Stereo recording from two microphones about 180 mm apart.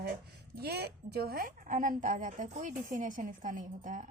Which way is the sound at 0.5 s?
60° right (ahead or behind).